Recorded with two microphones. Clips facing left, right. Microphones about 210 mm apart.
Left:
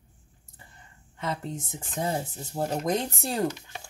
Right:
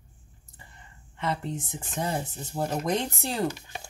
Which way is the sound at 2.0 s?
40° left (ahead or behind).